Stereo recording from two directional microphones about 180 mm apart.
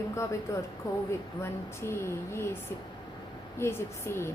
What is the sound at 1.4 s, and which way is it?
A woman's voice, 15° left (ahead or behind).